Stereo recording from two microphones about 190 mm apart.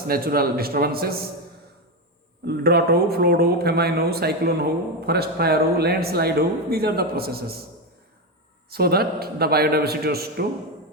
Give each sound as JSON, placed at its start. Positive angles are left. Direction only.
{"t": 0.1, "sound": "a man's voice", "side_deg": -55}
{"t": 2.4, "sound": "speech", "side_deg": -60}
{"t": 8.7, "sound": "speech", "side_deg": -55}